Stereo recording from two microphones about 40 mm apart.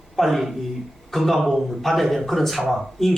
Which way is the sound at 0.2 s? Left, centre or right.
Centre.